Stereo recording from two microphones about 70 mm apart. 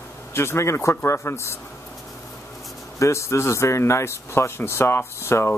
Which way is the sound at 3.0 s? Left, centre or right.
Left.